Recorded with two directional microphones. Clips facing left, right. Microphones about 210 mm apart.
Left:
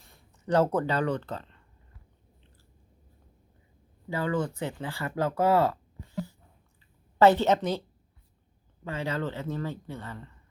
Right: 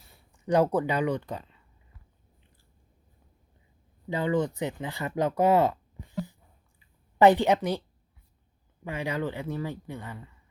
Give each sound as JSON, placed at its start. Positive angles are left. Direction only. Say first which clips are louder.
{"t": 0.0, "sound": "speech", "louder": "right 2 dB", "side_deg": -10}
{"t": 4.1, "sound": "speech", "louder": "right 2 dB", "side_deg": -20}
{"t": 8.8, "sound": "speech", "louder": "right 1 dB", "side_deg": -15}